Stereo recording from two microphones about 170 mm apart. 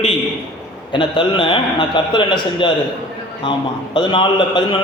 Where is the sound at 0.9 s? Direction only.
30° left (ahead or behind).